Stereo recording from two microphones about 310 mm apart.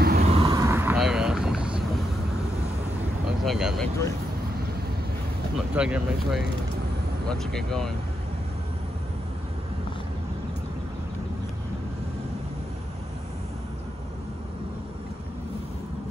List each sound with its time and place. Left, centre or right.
0.0 s a sound: right
0.4 s vehicle: centre
3.4 s speech: centre
5.8 s speech: centre